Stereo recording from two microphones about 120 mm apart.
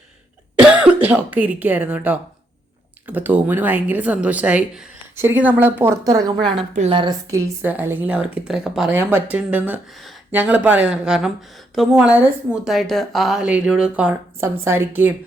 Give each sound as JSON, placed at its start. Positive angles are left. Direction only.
{"t": 0.6, "sound": "cough", "side_deg": -10}
{"t": 1.0, "sound": "a woman's voice", "side_deg": -10}
{"t": 6.1, "sound": "a woman's voice", "side_deg": -35}
{"t": 7.3, "sound": "a woman's voice", "side_deg": -25}
{"t": 7.7, "sound": "a woman's voice", "side_deg": -15}
{"t": 14.6, "sound": "a woman's voice", "side_deg": -20}